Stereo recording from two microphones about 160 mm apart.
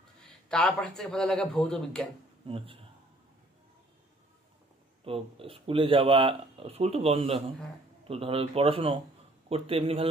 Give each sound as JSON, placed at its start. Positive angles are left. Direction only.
{"t": 0.5, "sound": "a man's voice", "side_deg": 5}
{"t": 2.4, "sound": "speech", "side_deg": -35}
{"t": 5.0, "sound": "speech", "side_deg": -35}